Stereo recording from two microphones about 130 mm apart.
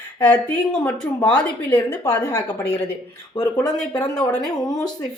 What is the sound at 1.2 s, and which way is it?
Speech, 35° left (ahead or behind).